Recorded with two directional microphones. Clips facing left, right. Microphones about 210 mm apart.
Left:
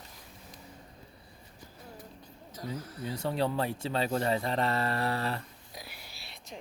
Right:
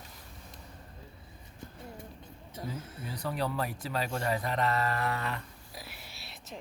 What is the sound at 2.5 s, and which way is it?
Speech, 25° right (ahead or behind).